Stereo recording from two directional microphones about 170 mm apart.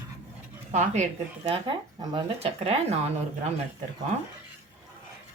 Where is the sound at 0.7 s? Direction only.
45° right (ahead or behind).